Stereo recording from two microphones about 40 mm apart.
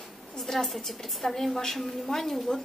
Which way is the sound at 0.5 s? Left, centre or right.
Centre.